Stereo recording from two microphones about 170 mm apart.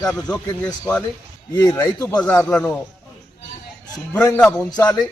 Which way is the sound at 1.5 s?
20° left (ahead or behind).